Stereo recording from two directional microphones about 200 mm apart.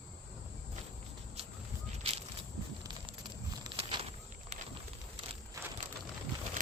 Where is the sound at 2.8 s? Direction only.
20° right (ahead or behind).